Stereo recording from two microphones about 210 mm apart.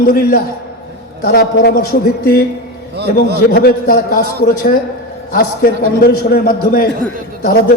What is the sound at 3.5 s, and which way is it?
A man's voice, 45° left (ahead or behind).